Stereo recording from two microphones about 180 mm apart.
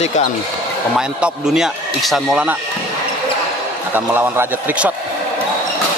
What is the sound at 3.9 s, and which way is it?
A man's voice, 10° right (ahead or behind).